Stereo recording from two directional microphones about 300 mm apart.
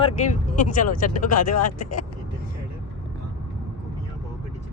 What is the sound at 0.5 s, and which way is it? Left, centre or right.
Speech, left.